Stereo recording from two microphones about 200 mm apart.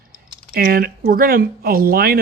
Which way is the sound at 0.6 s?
50° right (ahead or behind).